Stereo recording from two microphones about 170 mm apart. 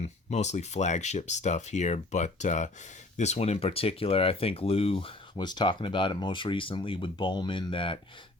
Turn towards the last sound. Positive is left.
turn(degrees=30)  # may be behind; listen again after turning